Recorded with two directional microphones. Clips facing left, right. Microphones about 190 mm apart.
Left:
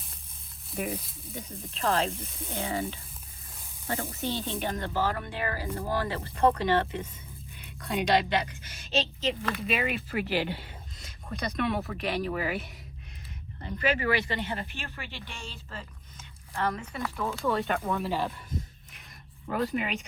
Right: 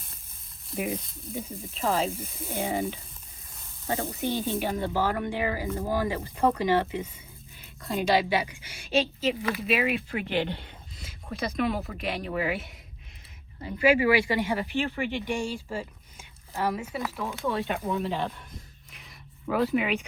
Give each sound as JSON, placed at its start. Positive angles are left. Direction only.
{"t": 0.7, "sound": "speech", "side_deg": 0}
{"t": 2.6, "sound": "speech", "side_deg": -15}
{"t": 4.2, "sound": "speech", "side_deg": -15}
{"t": 7.6, "sound": "speech", "side_deg": 0}